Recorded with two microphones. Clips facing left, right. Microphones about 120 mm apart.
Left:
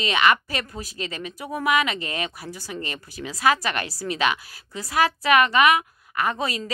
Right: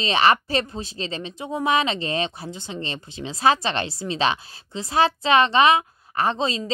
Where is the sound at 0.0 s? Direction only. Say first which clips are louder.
Right 2 dB; 30° right (ahead or behind).